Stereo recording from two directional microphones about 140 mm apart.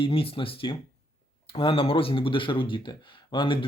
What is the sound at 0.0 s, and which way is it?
Speech, 40° left (ahead or behind).